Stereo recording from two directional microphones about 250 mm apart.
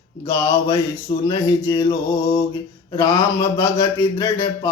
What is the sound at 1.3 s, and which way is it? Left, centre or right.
Speech, centre.